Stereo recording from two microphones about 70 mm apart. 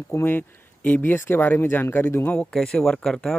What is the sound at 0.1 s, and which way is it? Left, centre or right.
Speech, left.